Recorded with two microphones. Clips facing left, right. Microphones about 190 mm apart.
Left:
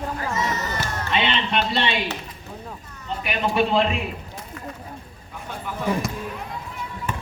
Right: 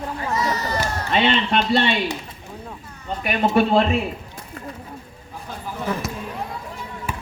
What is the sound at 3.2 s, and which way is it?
Speech, 45° right (ahead or behind).